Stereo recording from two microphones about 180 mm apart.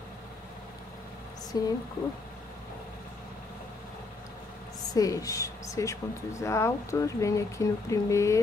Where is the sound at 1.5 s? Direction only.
20° left (ahead or behind).